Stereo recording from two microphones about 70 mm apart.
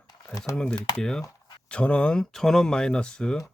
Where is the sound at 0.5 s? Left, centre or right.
Centre.